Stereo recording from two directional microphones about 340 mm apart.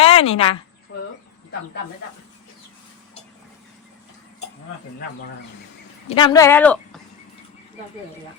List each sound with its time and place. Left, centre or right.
0.0 s speech: centre
0.9 s a sound: left
6.1 s speech: centre